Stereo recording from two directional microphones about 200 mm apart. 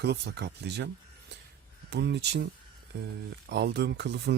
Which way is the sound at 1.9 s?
55° right (ahead or behind).